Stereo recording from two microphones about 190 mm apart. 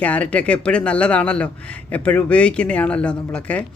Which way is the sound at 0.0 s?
5° left (ahead or behind).